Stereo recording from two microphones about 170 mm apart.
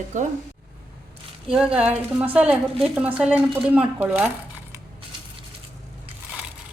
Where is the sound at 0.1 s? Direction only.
50° right (ahead or behind).